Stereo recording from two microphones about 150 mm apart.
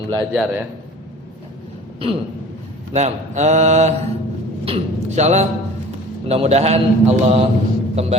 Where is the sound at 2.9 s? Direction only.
50° right (ahead or behind).